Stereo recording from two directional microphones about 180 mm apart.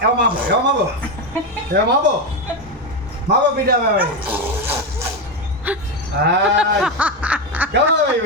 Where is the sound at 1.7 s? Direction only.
70° right (ahead or behind).